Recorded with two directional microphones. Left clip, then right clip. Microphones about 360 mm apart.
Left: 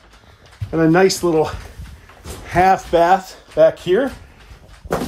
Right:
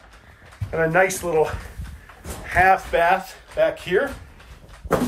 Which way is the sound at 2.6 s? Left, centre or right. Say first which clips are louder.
Left 3 dB; left.